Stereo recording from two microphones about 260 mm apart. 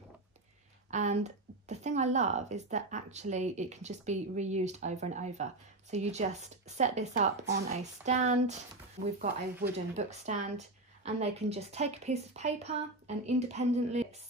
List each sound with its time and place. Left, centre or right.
0.8 s speech: right